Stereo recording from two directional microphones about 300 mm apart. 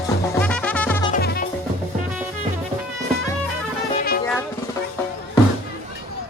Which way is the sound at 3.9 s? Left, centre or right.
Left.